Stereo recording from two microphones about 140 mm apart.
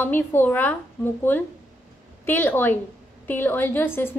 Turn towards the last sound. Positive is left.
turn(degrees=15)  # may be behind; listen again after turning